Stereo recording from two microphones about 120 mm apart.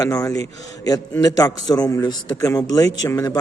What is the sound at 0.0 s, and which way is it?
A man's voice, 30° left (ahead or behind).